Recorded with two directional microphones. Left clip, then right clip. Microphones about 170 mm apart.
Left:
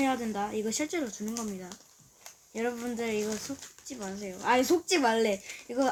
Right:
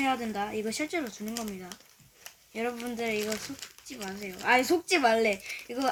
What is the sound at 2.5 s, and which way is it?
Speech, 5° right (ahead or behind).